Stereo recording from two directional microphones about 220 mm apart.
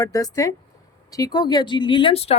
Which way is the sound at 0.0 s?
15° left (ahead or behind).